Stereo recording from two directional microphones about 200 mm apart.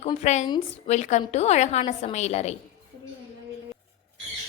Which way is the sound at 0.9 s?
35° left (ahead or behind).